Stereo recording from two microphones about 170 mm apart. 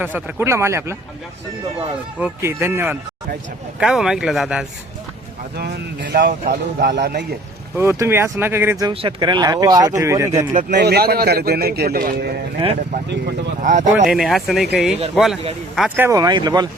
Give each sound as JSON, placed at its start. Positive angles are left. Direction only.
{"t": 0.0, "sound": "speech", "side_deg": -10}
{"t": 2.2, "sound": "speech", "side_deg": -15}
{"t": 5.5, "sound": "a man's voice", "side_deg": -70}
{"t": 7.8, "sound": "speech", "side_deg": -15}
{"t": 8.9, "sound": "speech", "side_deg": -30}
{"t": 10.5, "sound": "speech", "side_deg": -50}
{"t": 10.8, "sound": "a man's voice", "side_deg": -70}
{"t": 13.1, "sound": "speech", "side_deg": -90}
{"t": 13.6, "sound": "speech", "side_deg": -50}
{"t": 14.1, "sound": "speech", "side_deg": 0}
{"t": 16.0, "sound": "speech", "side_deg": -20}